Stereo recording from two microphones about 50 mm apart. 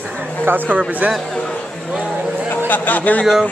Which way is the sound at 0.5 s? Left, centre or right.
Right.